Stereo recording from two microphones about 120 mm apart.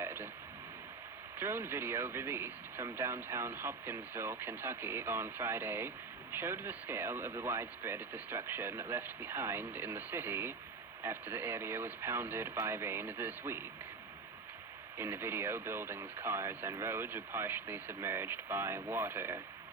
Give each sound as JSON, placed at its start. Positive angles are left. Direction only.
{"t": 0.0, "sound": "a sound", "side_deg": -20}
{"t": 1.4, "sound": "speech", "side_deg": -20}
{"t": 14.9, "sound": "speech", "side_deg": -20}